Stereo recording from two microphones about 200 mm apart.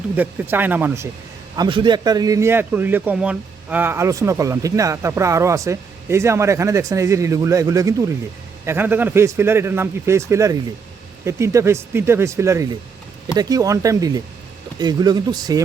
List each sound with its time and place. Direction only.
0.2 s a man's voice: 10° right (ahead or behind)
1.5 s a man's voice: 25° right (ahead or behind)